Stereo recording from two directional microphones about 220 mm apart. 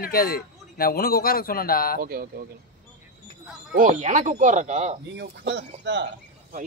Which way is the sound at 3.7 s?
35° right (ahead or behind).